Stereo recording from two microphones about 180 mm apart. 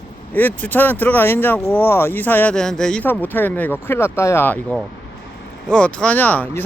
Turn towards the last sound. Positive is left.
turn(degrees=10)  # may be behind; listen again after turning